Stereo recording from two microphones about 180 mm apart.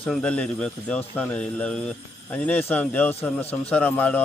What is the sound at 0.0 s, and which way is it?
Speech, 5° left (ahead or behind).